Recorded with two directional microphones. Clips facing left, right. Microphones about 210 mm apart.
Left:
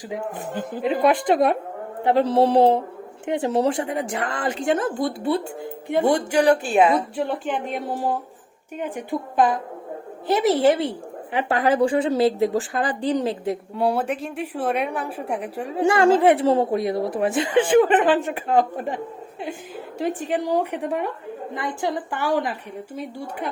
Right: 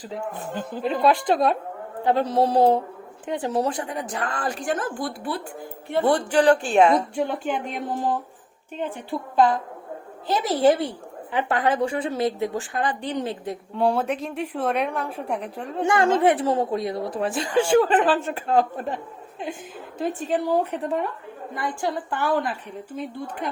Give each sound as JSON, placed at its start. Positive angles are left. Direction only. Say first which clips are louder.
{"t": 0.1, "sound": "a woman's voice", "louder": "left 2 dB", "side_deg": 15}
{"t": 13.7, "sound": "a woman's voice", "louder": "right 2 dB", "side_deg": 0}
{"t": 15.8, "sound": "a woman's voice", "louder": "left 3 dB", "side_deg": 30}
{"t": 20.2, "sound": "a woman's voice", "louder": "right 2 dB", "side_deg": 15}